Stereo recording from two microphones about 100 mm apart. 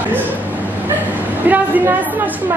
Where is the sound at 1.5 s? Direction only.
15° right (ahead or behind).